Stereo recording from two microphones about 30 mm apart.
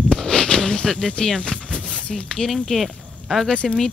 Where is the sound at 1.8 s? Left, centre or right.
Left.